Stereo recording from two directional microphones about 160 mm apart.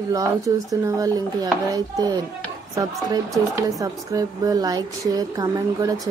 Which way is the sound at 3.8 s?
20° right (ahead or behind).